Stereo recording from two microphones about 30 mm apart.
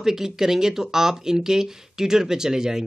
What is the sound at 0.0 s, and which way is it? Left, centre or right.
Speech, centre.